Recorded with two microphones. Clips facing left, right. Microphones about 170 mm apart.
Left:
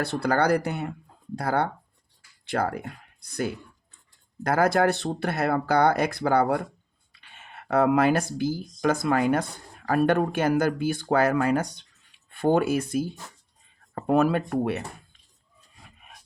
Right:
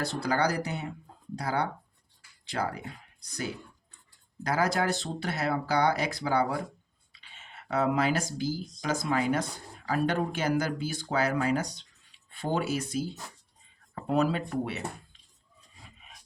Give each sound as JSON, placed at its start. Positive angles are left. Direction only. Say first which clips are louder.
{"t": 0.0, "sound": "speech", "louder": "left 4 dB", "side_deg": 60}
{"t": 4.4, "sound": "speech", "louder": "left 6 dB", "side_deg": 55}
{"t": 16.0, "sound": "rub", "louder": "left 3 dB", "side_deg": 55}